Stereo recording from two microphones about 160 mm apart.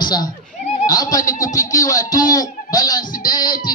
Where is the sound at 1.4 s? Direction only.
20° left (ahead or behind).